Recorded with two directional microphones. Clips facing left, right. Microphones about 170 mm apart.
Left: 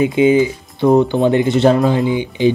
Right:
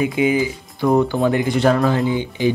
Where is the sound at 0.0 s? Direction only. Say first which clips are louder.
Left 6 dB; 25° left (ahead or behind).